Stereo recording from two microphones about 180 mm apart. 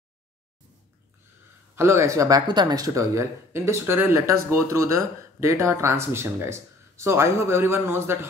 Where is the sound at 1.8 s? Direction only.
15° right (ahead or behind).